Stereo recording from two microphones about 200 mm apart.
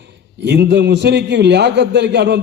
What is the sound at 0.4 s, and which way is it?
A man's voice, 60° right (ahead or behind).